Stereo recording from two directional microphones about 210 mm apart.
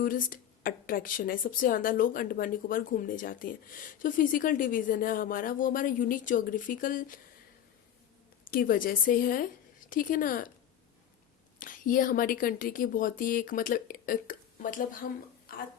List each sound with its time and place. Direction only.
0.0 s speech: 40° left (ahead or behind)
8.4 s a woman's voice: 40° left (ahead or behind)
11.6 s speech: 40° left (ahead or behind)